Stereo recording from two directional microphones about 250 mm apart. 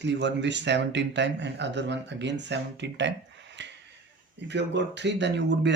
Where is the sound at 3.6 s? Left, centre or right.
Right.